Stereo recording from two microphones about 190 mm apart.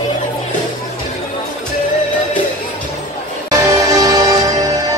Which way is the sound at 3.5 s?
20° right (ahead or behind).